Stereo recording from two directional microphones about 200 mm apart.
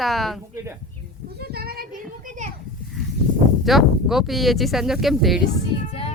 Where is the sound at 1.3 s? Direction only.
50° right (ahead or behind).